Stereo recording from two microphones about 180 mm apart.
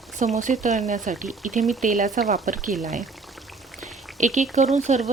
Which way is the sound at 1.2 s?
Centre (ahead or behind).